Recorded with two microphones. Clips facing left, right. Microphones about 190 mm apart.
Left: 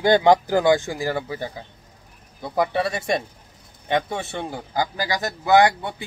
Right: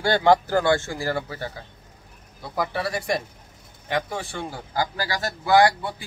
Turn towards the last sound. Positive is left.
turn(degrees=20)  # may be behind; listen again after turning